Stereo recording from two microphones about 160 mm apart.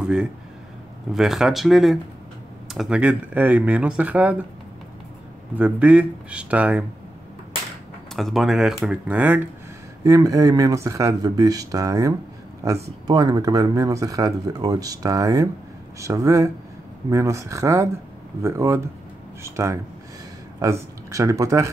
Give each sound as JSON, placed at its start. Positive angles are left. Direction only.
{"t": 0.0, "sound": "speech", "side_deg": -5}
{"t": 5.6, "sound": "speech", "side_deg": -10}
{"t": 8.2, "sound": "speech", "side_deg": 0}
{"t": 10.0, "sound": "speech", "side_deg": -20}